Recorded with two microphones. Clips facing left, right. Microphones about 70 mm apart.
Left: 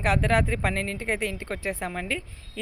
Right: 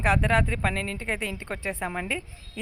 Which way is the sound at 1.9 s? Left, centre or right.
Centre.